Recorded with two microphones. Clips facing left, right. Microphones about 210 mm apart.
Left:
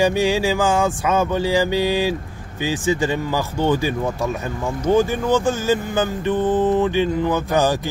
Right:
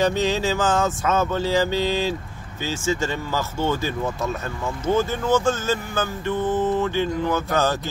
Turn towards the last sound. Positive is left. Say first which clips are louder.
# left 4 dB
turn(degrees=15)  # may be behind; listen again after turning